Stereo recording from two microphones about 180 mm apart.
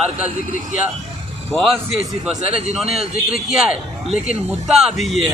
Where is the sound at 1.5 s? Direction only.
Centre (ahead or behind).